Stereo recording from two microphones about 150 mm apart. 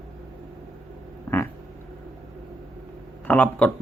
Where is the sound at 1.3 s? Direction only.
15° left (ahead or behind).